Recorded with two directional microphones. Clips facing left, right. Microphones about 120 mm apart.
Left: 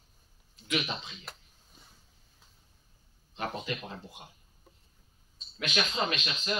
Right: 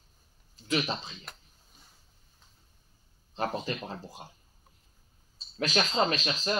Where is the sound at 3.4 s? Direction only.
35° right (ahead or behind).